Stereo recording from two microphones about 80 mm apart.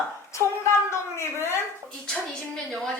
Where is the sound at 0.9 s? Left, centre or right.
Left.